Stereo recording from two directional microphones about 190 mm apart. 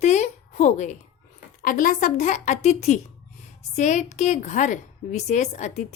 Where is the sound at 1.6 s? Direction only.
45° left (ahead or behind).